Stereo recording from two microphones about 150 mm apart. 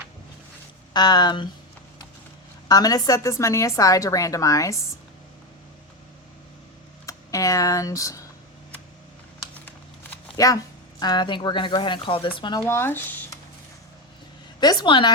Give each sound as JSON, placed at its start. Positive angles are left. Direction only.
{"t": 0.9, "sound": "speech", "side_deg": 30}
{"t": 2.6, "sound": "speech", "side_deg": 25}
{"t": 7.0, "sound": "speech", "side_deg": 20}
{"t": 9.6, "sound": "shuffling cards", "side_deg": 15}
{"t": 10.3, "sound": "speech", "side_deg": 20}
{"t": 12.6, "sound": "speech", "side_deg": 15}
{"t": 14.6, "sound": "speech", "side_deg": 25}